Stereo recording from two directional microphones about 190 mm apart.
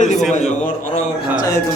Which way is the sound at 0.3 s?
40° left (ahead or behind).